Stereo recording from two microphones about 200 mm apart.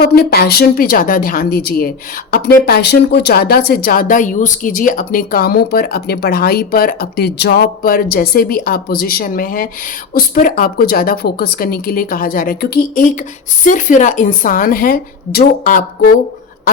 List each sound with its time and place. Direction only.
0.0 s speech: 50° left (ahead or behind)